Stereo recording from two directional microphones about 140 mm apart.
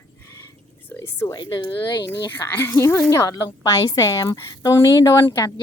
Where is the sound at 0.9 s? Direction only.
20° left (ahead or behind).